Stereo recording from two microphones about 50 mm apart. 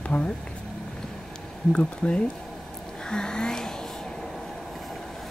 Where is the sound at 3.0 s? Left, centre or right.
Centre.